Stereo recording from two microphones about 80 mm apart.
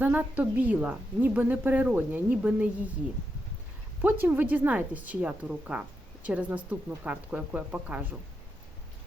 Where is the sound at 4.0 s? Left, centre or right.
Right.